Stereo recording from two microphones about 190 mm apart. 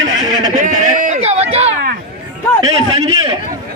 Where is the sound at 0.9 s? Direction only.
40° right (ahead or behind).